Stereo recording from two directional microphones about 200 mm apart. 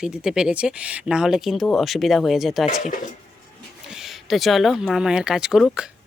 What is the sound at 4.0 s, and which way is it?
Speech, centre (ahead or behind).